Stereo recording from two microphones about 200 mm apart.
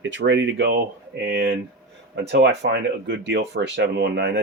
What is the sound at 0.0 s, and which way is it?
Speech, 65° right (ahead or behind).